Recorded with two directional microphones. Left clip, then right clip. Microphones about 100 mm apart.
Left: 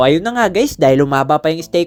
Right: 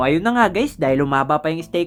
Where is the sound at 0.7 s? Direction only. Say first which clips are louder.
Left 7 dB; 35° left (ahead or behind).